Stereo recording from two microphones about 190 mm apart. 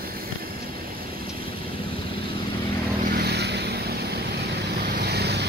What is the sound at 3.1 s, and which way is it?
Vehicle, 55° right (ahead or behind).